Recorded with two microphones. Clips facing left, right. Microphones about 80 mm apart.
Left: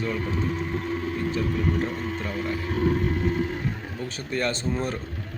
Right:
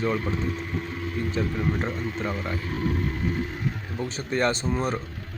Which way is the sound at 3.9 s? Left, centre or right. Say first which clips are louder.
Right 5 dB; right.